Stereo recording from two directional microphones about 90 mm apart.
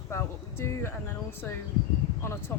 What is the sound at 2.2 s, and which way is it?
Speech, 25° left (ahead or behind).